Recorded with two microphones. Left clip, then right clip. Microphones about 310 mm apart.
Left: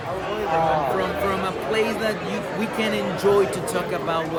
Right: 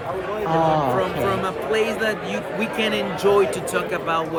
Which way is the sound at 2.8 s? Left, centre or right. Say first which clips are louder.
Right 1 dB; centre.